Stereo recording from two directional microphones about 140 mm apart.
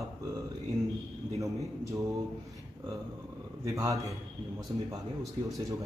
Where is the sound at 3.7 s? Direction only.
25° right (ahead or behind).